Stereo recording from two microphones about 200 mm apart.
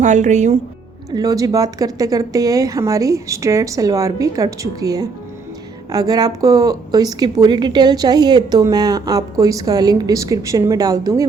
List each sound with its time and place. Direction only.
0.0 s speech: 35° right (ahead or behind)
1.1 s a woman's voice: 20° right (ahead or behind)